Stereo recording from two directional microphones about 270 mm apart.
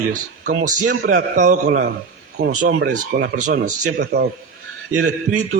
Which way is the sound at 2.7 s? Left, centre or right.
Right.